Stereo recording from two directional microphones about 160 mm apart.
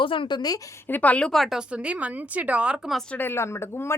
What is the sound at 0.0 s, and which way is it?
Speech, 30° left (ahead or behind).